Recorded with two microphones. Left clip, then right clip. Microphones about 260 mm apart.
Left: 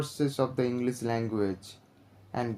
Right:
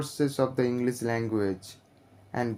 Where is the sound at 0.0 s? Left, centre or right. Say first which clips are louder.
Right 2 dB; right.